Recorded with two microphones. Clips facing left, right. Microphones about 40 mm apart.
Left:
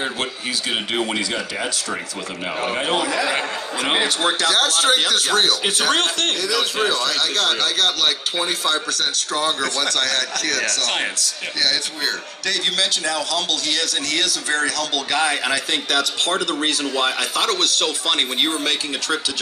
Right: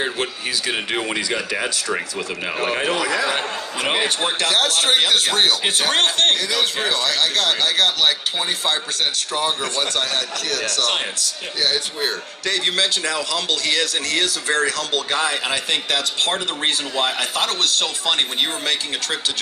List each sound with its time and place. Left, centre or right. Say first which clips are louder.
4.4 s speech: even; right
12.5 s speech: right 1 dB; right